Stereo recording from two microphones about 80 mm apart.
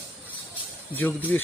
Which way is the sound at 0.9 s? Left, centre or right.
Left.